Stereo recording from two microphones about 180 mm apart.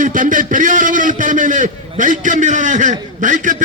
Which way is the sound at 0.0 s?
45° right (ahead or behind).